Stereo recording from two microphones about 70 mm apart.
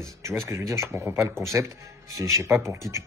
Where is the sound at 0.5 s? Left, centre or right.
Right.